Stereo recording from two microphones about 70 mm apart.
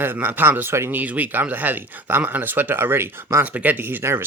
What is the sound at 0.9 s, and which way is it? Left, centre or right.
Speech, right.